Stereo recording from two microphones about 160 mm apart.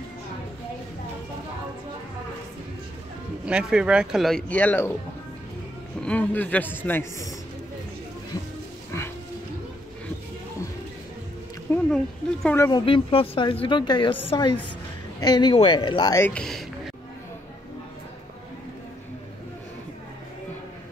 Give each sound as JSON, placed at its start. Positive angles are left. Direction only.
{"t": 3.4, "sound": "a man's voice", "side_deg": -5}
{"t": 5.9, "sound": "a man's voice", "side_deg": 10}
{"t": 11.7, "sound": "a sound", "side_deg": 10}
{"t": 12.4, "sound": "a man's voice", "side_deg": 15}
{"t": 12.7, "sound": "a woman's voice", "side_deg": 35}
{"t": 16.2, "sound": "a man's voice", "side_deg": 10}